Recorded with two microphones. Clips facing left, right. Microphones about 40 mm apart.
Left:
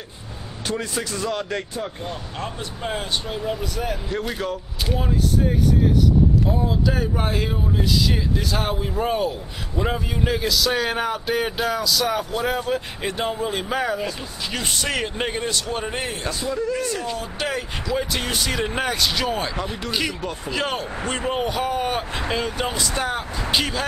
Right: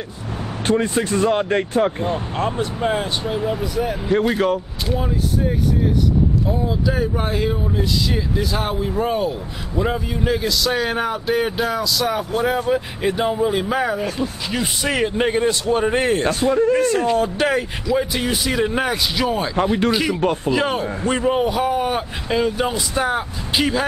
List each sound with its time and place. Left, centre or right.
0.7 s speech: right
2.8 s a man's voice: centre
4.1 s speech: right
4.8 s a man's voice: centre
16.0 s speech: right
16.3 s speech: right
17.4 s a man's voice: centre
17.8 s a man's voice: centre